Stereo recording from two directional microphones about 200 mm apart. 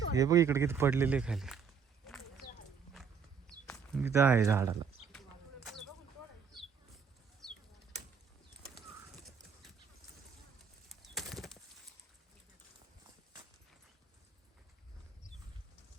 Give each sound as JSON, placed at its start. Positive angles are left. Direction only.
{"t": 0.1, "sound": "speech", "side_deg": -15}
{"t": 3.9, "sound": "speech", "side_deg": -10}
{"t": 7.4, "sound": "bird flight", "side_deg": 0}
{"t": 10.8, "sound": "bird", "side_deg": 0}